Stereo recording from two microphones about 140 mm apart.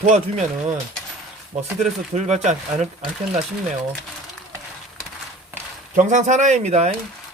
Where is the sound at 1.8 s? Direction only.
55° right (ahead or behind).